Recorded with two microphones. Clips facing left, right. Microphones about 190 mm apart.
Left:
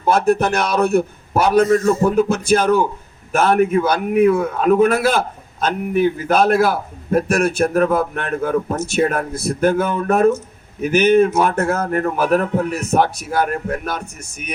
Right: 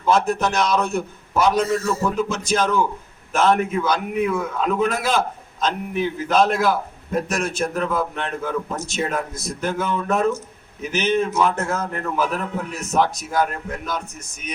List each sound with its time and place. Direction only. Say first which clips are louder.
0.0 s a man's voice: left 4 dB; 55° left (ahead or behind)